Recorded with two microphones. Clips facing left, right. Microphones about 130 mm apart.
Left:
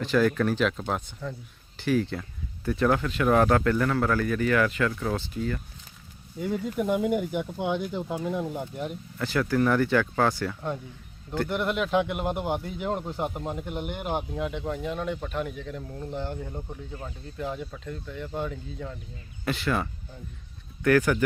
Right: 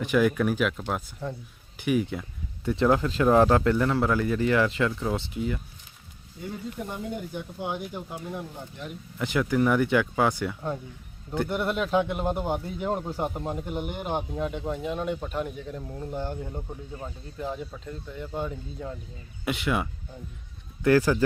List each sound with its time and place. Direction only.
0.0 s speech: 15° right (ahead or behind)
1.7 s speech: 15° right (ahead or behind)
6.5 s speech: 90° left
9.1 s speech: 15° right (ahead or behind)
14.8 s speech: 15° right (ahead or behind)
17.4 s speech: centre (ahead or behind)
20.8 s speech: 25° right (ahead or behind)